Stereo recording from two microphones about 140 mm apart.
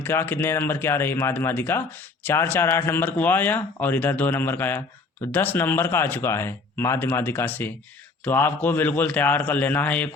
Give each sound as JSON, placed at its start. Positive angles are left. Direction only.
{"t": 0.0, "sound": "speech", "side_deg": 15}